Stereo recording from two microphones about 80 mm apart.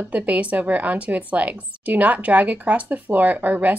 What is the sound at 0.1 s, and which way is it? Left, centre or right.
A woman's voice, centre.